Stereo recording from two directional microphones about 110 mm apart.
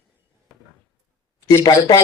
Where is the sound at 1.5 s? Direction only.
30° left (ahead or behind).